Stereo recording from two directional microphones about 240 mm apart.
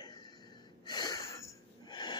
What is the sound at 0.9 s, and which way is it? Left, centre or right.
Wheeze, centre.